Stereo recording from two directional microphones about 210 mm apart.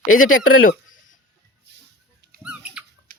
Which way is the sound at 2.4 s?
5° right (ahead or behind).